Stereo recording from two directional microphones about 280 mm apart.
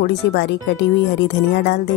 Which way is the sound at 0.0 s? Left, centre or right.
Left.